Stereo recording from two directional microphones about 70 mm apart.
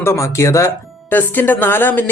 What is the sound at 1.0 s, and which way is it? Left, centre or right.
Speech, left.